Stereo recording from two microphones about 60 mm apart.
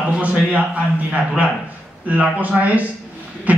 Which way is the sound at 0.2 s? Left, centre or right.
Right.